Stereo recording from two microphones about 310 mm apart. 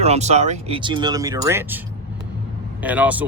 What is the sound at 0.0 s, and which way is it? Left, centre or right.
Speech, right.